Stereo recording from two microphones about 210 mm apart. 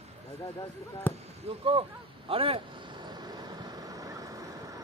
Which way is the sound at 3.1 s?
20° right (ahead or behind).